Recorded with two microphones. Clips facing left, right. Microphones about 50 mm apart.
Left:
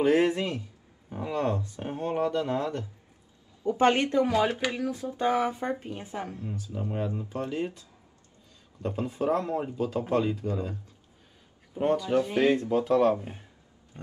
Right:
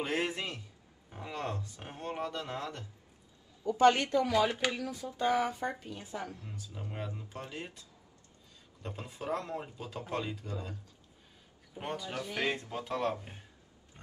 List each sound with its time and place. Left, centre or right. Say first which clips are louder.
0.0 s speech: left 11 dB; centre
0.4 s speech: left 8 dB; left
9.1 s speech: left 8 dB; left
11.7 s a man's voice: left 13 dB; left
12.8 s speech: left 10 dB; centre
13.1 s speech: left 10 dB; left